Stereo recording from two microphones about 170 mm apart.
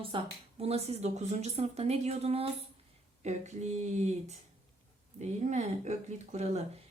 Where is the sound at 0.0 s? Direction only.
30° right (ahead or behind).